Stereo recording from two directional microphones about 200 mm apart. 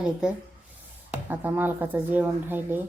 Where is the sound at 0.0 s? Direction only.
5° right (ahead or behind).